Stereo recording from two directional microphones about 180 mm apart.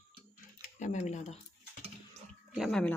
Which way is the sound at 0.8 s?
40° left (ahead or behind).